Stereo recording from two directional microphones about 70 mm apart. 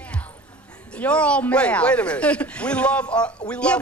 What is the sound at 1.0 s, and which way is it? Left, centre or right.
Speech, centre.